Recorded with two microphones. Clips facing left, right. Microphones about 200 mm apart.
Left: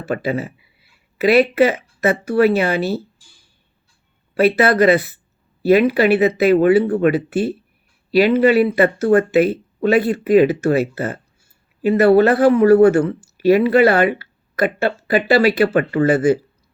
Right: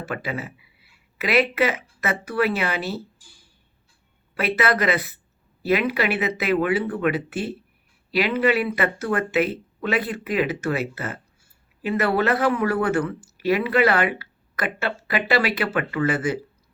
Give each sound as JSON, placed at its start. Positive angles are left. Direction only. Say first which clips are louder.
{"t": 0.0, "sound": "speech", "louder": "left 8 dB", "side_deg": 30}
{"t": 4.4, "sound": "speech", "louder": "left 9 dB", "side_deg": 30}